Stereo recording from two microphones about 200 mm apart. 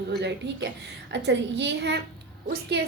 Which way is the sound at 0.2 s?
60° right (ahead or behind).